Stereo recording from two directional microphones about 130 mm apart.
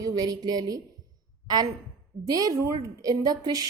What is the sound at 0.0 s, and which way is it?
Speech, 30° right (ahead or behind).